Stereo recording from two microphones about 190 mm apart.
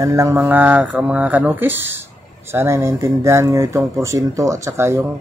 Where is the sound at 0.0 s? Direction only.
15° right (ahead or behind).